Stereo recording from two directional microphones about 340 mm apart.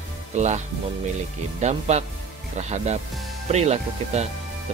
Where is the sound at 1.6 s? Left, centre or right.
Centre.